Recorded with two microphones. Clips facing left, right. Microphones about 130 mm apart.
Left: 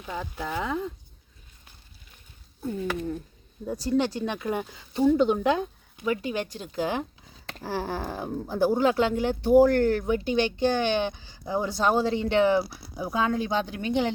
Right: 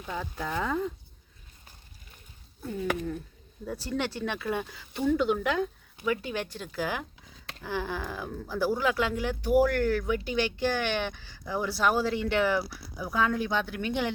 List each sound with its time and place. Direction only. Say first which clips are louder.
0.0 s speech: left 1 dB; 5° left (ahead or behind)
2.6 s speech: left 2 dB; 15° left (ahead or behind)
7.6 s speech: left 3 dB; 35° left (ahead or behind)